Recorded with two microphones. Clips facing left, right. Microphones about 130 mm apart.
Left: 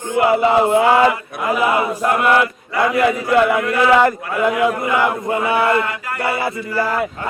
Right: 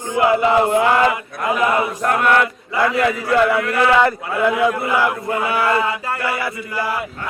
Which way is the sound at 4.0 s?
15° left (ahead or behind).